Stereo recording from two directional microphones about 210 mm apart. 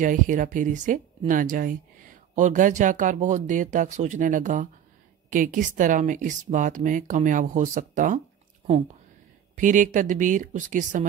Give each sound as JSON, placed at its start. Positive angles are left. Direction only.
{"t": 0.0, "sound": "speech", "side_deg": -40}
{"t": 9.6, "sound": "speech", "side_deg": -35}